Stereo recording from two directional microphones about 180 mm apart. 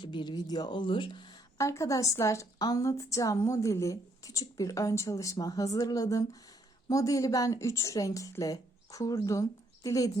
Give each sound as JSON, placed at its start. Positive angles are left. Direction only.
{"t": 0.0, "sound": "a woman's voice", "side_deg": 25}